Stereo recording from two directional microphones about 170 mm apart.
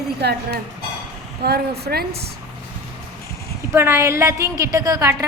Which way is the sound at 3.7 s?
15° right (ahead or behind).